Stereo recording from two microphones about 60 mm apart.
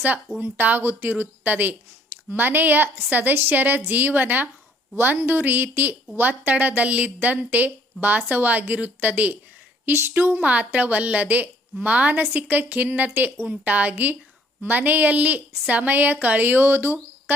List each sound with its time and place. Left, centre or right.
0.3 s a woman's voice: right
9.8 s a woman's voice: right
10.4 s a woman's voice: right